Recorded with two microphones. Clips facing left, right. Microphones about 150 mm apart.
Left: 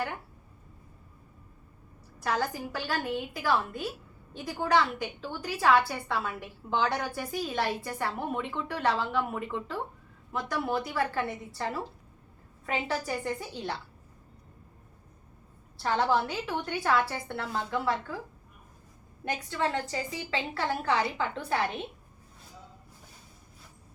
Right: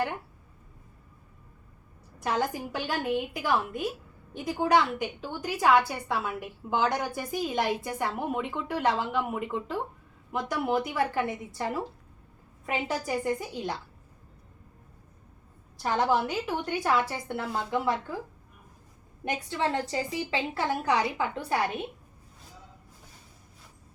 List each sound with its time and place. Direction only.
2.2 s a woman's voice: 20° right (ahead or behind)
15.8 s a woman's voice: 15° right (ahead or behind)
19.2 s a woman's voice: 20° right (ahead or behind)